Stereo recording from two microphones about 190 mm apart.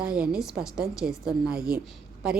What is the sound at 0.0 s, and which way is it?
A woman's voice, 5° right (ahead or behind).